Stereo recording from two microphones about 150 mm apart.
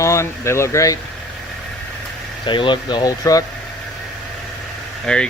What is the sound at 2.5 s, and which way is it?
Speech, 30° left (ahead or behind).